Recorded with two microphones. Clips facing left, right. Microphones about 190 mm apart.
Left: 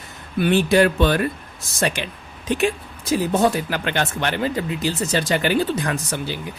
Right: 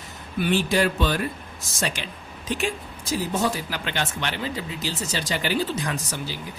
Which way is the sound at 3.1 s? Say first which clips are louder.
Left 6 dB; 60° left (ahead or behind).